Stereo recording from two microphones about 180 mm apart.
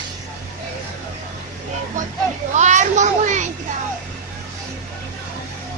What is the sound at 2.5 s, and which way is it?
Speech, 40° right (ahead or behind).